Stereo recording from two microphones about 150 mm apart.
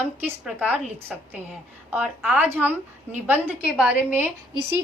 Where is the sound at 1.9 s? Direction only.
5° right (ahead or behind).